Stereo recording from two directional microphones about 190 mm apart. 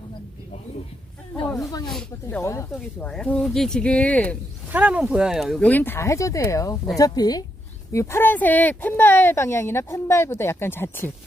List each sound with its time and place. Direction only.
2.2 s speech: 15° left (ahead or behind)
2.7 s speech: 5° left (ahead or behind)
4.7 s speech: 10° right (ahead or behind); by 11.1 s 10° left (ahead or behind)